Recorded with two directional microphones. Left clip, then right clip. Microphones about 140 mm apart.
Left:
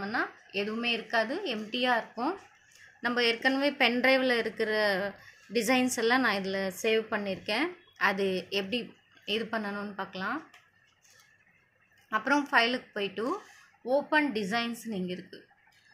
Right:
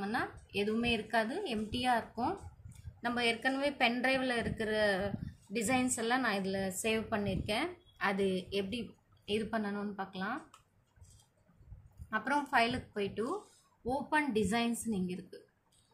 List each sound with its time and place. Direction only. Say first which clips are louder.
0.0 s a woman's voice: left 4 dB; 45° left (ahead or behind)
12.1 s a woman's voice: left 5 dB; 45° left (ahead or behind)